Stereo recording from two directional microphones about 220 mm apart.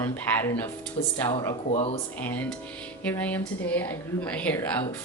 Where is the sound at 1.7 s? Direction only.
25° left (ahead or behind).